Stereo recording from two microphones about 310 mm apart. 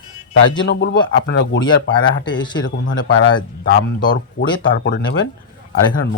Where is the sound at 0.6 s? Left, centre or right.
Left.